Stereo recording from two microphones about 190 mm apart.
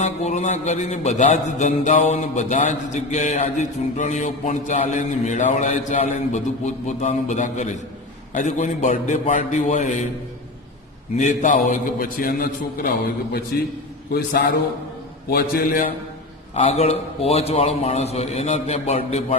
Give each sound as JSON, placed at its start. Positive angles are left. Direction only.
{"t": 0.0, "sound": "a man's voice", "side_deg": 40}
{"t": 11.2, "sound": "a man's voice", "side_deg": 40}
{"t": 15.3, "sound": "a man's voice", "side_deg": 50}
{"t": 16.6, "sound": "a man's voice", "side_deg": 35}